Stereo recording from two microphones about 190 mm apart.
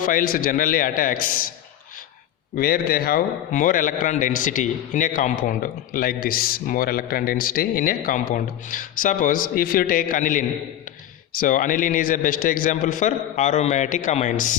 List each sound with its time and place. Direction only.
0.0 s a man's voice: 45° left (ahead or behind)
2.6 s a man's voice: 50° left (ahead or behind)